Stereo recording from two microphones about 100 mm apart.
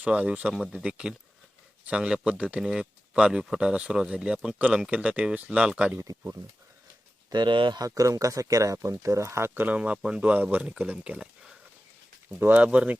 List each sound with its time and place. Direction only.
0.0 s speech: 10° right (ahead or behind)
7.3 s speech: 50° right (ahead or behind)
7.8 s speech: 35° right (ahead or behind)
9.6 s speech: 10° right (ahead or behind)